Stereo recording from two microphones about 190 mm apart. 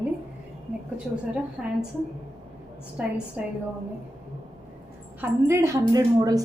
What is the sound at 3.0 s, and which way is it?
Speech, 5° right (ahead or behind).